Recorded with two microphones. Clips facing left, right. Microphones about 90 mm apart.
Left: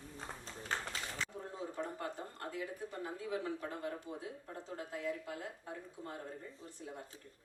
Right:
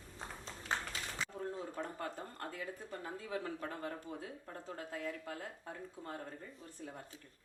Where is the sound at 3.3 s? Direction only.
45° right (ahead or behind).